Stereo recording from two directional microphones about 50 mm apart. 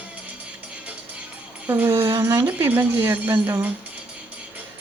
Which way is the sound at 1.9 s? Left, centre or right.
Right.